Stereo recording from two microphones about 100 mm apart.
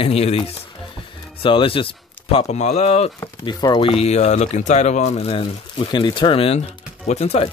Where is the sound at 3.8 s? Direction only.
85° left.